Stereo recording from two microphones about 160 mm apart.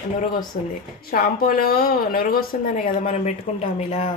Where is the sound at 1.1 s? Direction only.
65° left (ahead or behind); by 3.3 s 50° left (ahead or behind).